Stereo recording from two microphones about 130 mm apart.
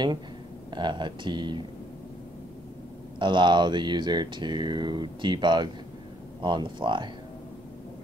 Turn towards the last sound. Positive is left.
turn(degrees=-40)  # may be behind; listen again after turning